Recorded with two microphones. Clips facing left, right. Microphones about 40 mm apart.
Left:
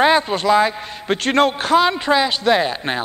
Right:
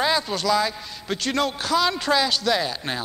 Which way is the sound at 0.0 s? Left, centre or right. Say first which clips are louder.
Left 7 dB; left.